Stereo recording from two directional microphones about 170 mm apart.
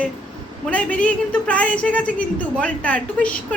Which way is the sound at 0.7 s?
10° left (ahead or behind).